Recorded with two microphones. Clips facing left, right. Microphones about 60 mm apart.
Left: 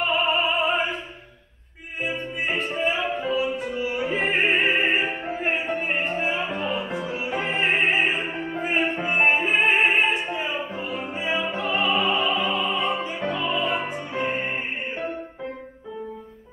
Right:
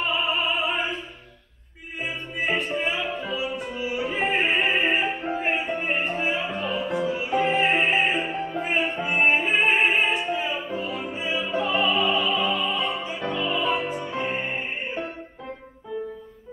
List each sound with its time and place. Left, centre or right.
0.3 s opera: left
2.0 s music: left
3.3 s opera: left
5.6 s music: left